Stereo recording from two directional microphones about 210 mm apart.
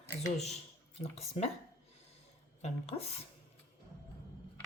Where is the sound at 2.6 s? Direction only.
30° left (ahead or behind).